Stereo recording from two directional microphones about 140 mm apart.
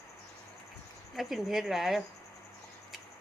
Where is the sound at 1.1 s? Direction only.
Centre (ahead or behind).